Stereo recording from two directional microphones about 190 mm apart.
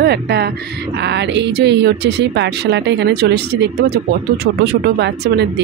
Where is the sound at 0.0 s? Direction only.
60° right (ahead or behind).